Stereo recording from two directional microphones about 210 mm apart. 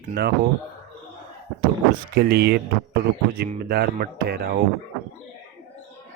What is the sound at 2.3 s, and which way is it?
Speech, 50° right (ahead or behind).